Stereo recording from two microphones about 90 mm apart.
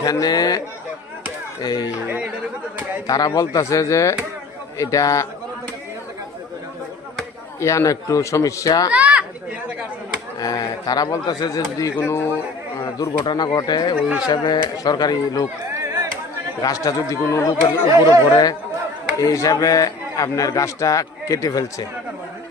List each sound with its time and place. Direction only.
0.0 s speech: 45° left (ahead or behind)
1.6 s speech: 50° left (ahead or behind)
2.0 s speech: 15° right (ahead or behind)
3.1 s a man's voice: 45° left (ahead or behind)
7.6 s a man's voice: 35° left (ahead or behind)
8.9 s chatter: 15° right (ahead or behind)
10.4 s speech: 45° left (ahead or behind)
12.0 s a man's voice: 30° left (ahead or behind)
13.2 s speech: 55° left (ahead or behind)
15.7 s a sound: 35° right (ahead or behind)
16.6 s a man's voice: 40° left (ahead or behind)
18.0 s a man's voice: 50° left (ahead or behind)